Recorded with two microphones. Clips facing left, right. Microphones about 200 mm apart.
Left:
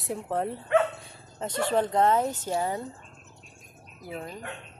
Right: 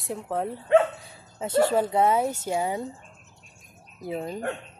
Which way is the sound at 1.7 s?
10° right (ahead or behind).